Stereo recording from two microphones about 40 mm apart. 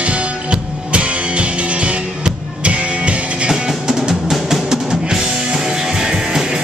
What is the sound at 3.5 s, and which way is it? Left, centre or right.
Music, centre.